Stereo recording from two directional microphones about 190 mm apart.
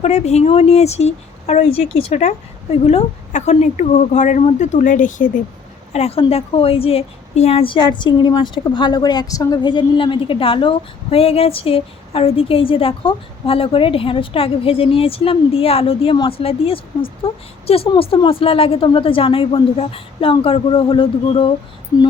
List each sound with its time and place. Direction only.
0.0 s a woman's voice: 35° left (ahead or behind)